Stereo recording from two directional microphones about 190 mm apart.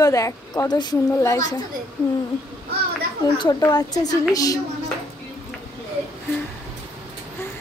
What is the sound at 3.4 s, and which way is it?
A woman's voice, 20° left (ahead or behind).